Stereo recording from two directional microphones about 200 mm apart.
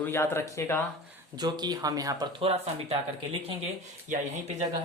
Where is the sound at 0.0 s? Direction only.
10° left (ahead or behind).